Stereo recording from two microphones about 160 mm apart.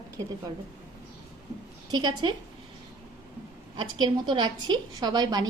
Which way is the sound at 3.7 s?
30° right (ahead or behind).